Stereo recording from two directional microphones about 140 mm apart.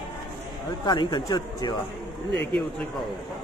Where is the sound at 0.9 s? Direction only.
30° left (ahead or behind).